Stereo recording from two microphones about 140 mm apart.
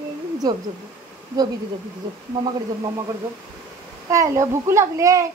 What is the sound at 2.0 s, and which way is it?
Speech, 30° right (ahead or behind).